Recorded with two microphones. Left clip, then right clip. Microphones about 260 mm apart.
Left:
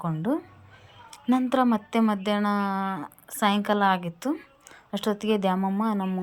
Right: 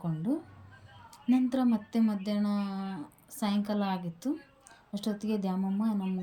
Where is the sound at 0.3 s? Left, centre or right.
Left.